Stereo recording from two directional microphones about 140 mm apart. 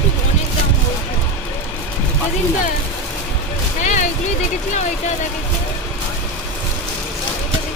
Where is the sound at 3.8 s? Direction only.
60° left (ahead or behind).